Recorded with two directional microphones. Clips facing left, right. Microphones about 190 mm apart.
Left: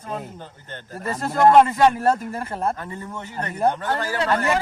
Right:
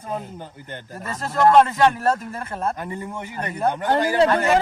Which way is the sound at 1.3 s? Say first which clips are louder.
Left 1 dB; 15° left (ahead or behind).